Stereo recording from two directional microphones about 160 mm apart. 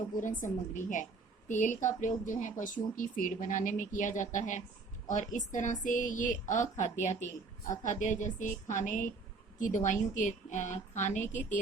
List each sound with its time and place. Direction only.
0.2 s speech: 55° left (ahead or behind)